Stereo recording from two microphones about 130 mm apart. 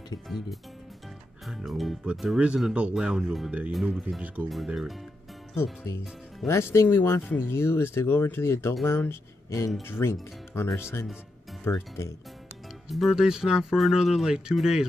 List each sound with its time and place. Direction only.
1.4 s speech: centre (ahead or behind)
5.6 s speech: 20° left (ahead or behind)
12.9 s speech: centre (ahead or behind)